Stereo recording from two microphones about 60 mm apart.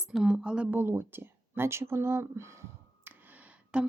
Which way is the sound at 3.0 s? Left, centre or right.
Right.